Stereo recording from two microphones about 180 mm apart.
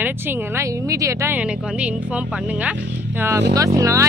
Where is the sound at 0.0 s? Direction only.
10° right (ahead or behind).